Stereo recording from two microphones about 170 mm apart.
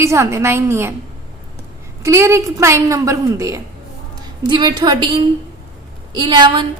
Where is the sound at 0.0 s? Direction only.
15° right (ahead or behind).